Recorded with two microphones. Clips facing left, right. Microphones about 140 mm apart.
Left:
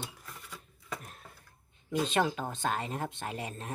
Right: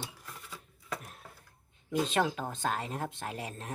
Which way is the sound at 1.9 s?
Centre (ahead or behind).